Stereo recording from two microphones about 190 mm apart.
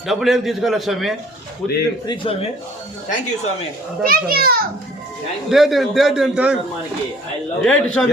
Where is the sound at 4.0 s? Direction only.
50° right (ahead or behind).